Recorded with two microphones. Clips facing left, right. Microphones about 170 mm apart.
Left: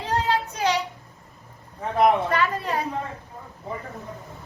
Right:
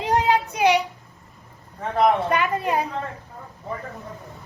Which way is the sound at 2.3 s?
15° right (ahead or behind).